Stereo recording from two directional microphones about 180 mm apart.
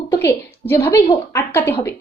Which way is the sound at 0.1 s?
15° left (ahead or behind).